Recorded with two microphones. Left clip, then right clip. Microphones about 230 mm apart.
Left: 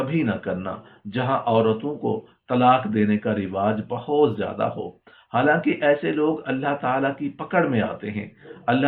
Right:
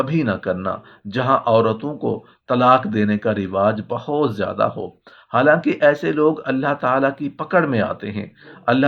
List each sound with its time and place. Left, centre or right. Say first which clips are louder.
0.0 s speech: right 4 dB; right